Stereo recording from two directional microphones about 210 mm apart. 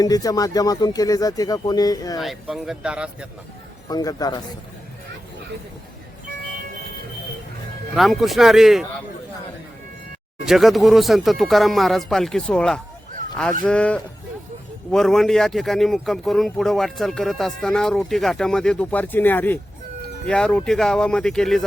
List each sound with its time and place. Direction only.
0.0 s speech: 15° left (ahead or behind)
2.1 s a man's voice: centre (ahead or behind)
3.8 s speech: 20° left (ahead or behind)
7.9 s a man's voice: centre (ahead or behind)
10.4 s a man's voice: centre (ahead or behind)